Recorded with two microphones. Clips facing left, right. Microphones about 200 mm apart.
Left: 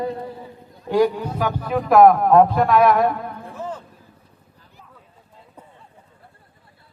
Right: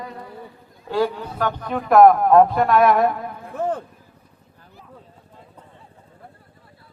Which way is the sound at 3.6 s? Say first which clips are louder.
Right 8 dB; 60° right (ahead or behind).